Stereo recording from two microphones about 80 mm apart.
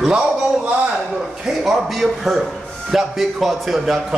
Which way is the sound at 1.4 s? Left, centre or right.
Centre.